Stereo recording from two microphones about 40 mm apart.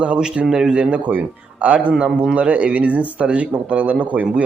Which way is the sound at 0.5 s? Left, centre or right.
Centre.